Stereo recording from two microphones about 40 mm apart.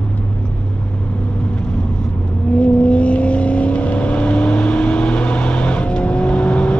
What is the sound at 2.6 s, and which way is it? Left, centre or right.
Vehicle, left.